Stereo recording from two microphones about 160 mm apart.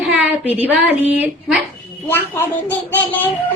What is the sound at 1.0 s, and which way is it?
Speech, 10° right (ahead or behind).